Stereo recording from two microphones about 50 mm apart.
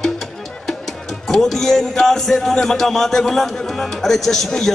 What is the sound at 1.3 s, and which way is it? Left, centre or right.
A man's voice, centre.